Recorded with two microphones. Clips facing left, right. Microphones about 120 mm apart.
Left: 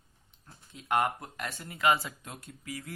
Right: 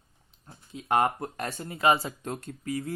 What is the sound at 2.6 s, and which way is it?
Speech, 30° right (ahead or behind).